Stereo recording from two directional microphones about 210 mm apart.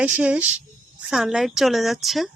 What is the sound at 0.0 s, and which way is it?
A woman's voice, 5° right (ahead or behind).